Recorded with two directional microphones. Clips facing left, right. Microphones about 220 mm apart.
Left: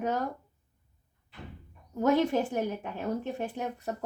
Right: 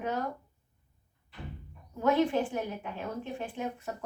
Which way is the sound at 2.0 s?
45° left (ahead or behind).